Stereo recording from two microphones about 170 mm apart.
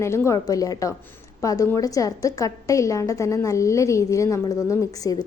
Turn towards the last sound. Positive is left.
turn(degrees=20)  # may be behind; listen again after turning